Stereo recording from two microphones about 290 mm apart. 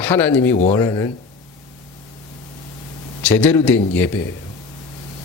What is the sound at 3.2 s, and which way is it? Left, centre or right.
Speech, centre.